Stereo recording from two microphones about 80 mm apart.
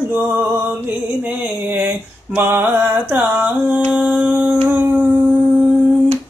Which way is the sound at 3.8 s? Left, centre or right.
Centre.